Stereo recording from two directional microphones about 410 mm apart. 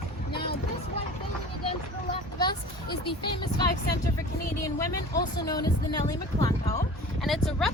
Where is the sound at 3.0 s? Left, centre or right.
Centre.